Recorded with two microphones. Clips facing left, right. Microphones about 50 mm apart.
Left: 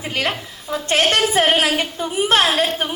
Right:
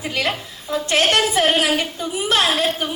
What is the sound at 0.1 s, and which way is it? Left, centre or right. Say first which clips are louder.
A woman's voice: left 1 dB; left.